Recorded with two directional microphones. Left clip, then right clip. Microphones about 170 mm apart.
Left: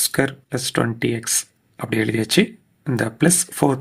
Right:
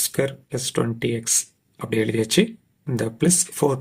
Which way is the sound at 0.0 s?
35° left (ahead or behind).